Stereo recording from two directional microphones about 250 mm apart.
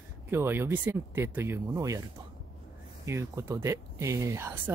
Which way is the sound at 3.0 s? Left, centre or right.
Centre.